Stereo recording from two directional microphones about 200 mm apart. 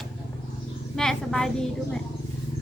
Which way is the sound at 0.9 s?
5° left (ahead or behind).